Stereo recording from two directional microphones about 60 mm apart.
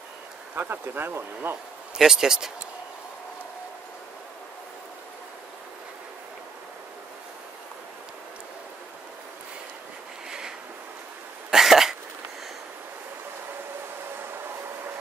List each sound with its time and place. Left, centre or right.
0.6 s speech: right
2.0 s speech: centre
11.5 s cough: centre